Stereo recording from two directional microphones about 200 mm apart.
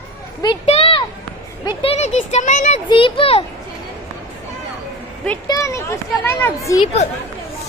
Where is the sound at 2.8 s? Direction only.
25° left (ahead or behind).